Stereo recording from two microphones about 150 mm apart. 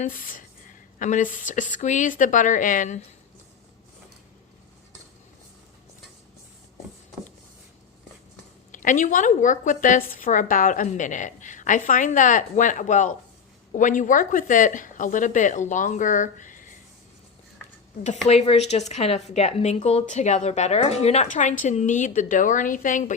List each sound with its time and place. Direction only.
0.0 s speech: 65° left (ahead or behind)
8.7 s speech: 60° left (ahead or behind)
18.3 s speech: 45° left (ahead or behind)